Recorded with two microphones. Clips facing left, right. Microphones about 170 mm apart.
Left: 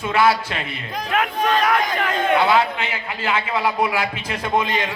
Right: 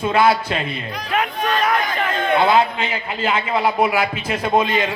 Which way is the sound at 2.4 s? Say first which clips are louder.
Right 2 dB; 20° right (ahead or behind).